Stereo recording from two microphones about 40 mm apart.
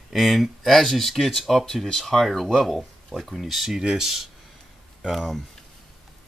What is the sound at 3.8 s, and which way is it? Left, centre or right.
Speech, centre.